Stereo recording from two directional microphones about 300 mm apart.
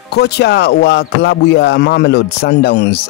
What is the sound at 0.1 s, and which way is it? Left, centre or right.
Speech, left.